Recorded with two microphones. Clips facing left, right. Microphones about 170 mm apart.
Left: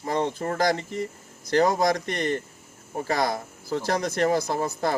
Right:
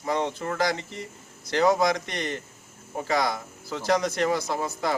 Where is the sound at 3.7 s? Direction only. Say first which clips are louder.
Right 1 dB; 45° left (ahead or behind).